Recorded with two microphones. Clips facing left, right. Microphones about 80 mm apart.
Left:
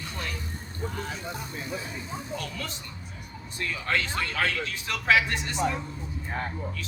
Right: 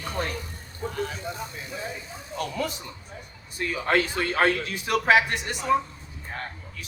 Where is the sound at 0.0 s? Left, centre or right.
Right.